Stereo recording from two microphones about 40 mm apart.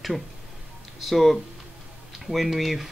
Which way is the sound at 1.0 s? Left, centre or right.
Centre.